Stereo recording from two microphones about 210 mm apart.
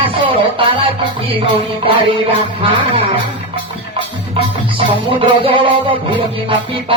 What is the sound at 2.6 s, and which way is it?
Music, 25° right (ahead or behind).